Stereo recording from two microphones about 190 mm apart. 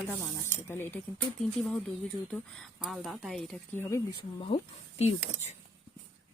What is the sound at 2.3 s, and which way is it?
Speech, centre (ahead or behind).